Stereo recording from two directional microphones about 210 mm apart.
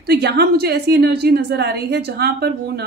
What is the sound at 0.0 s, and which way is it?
A woman's voice, 50° right (ahead or behind).